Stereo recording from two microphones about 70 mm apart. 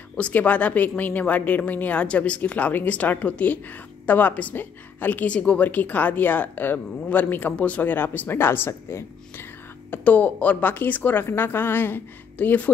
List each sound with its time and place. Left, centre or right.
0.2 s a woman's voice: left
9.8 s a woman's voice: left